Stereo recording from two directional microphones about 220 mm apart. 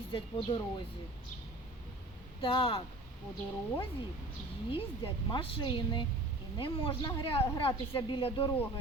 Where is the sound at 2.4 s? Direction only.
25° left (ahead or behind).